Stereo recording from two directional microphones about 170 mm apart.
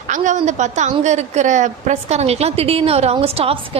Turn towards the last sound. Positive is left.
turn(degrees=-35)  # may be behind; listen again after turning